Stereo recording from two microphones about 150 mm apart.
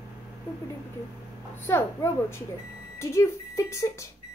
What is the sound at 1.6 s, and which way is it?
A woman's voice, 15° left (ahead or behind).